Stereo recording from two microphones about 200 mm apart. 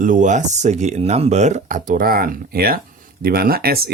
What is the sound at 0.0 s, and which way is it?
Speech, 40° right (ahead or behind).